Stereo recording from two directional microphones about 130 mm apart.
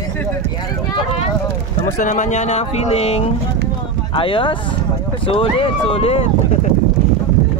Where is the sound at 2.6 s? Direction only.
50° left (ahead or behind).